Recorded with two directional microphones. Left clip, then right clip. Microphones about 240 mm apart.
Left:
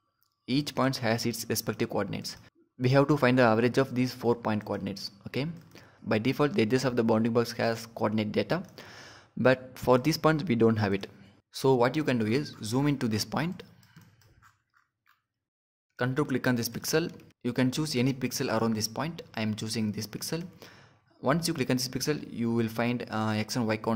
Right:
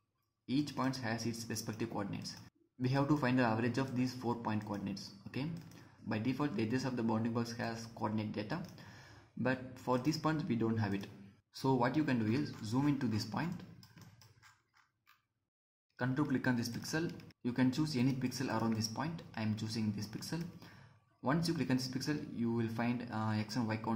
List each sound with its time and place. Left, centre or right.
0.5 s speech: left
16.0 s speech: left